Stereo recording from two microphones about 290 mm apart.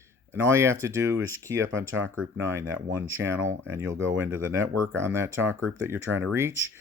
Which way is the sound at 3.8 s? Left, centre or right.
Right.